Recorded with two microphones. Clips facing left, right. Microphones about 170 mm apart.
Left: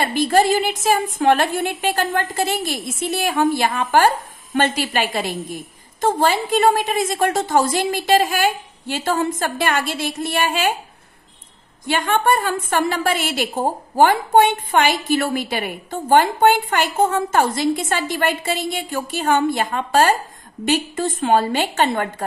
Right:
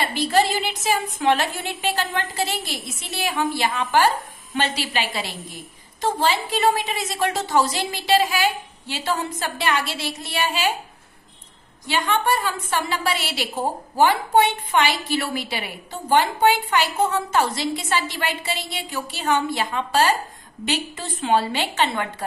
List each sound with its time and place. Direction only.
0.0 s a woman's voice: 50° left (ahead or behind)
11.9 s a woman's voice: 50° left (ahead or behind)